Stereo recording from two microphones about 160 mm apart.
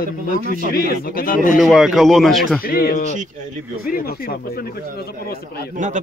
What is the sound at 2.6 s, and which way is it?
A man's voice, 70° left (ahead or behind).